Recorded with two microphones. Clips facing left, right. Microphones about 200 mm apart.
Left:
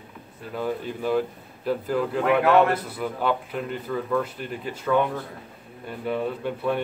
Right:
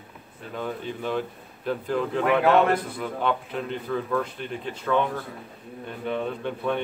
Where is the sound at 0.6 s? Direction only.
5° left (ahead or behind).